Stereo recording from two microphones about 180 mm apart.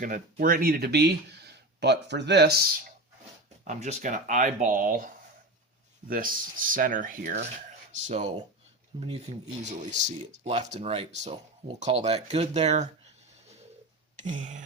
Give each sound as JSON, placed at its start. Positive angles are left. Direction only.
{"t": 0.0, "sound": "speech", "side_deg": -50}
{"t": 3.6, "sound": "speech", "side_deg": -40}
{"t": 9.0, "sound": "speech", "side_deg": -30}
{"t": 9.6, "sound": "speech", "side_deg": -40}
{"t": 14.2, "sound": "speech", "side_deg": -45}